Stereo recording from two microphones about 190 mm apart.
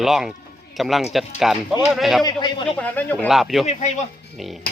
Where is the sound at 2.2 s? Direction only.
25° left (ahead or behind).